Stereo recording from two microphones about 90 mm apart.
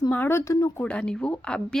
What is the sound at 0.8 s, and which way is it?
A woman's voice, 15° left (ahead or behind).